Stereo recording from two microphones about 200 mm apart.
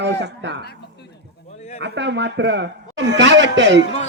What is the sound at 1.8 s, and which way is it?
A man's voice, 60° right (ahead or behind).